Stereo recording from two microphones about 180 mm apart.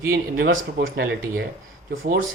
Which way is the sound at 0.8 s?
90° right.